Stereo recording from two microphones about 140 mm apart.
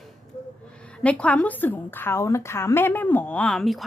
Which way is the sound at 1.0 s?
10° left (ahead or behind).